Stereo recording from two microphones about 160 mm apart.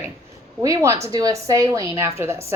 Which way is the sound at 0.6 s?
20° right (ahead or behind).